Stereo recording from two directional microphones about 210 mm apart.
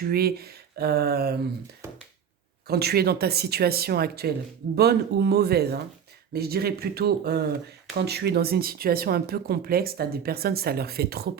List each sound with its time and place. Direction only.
0.0 s speech: 45° right (ahead or behind)
2.6 s speech: 50° right (ahead or behind)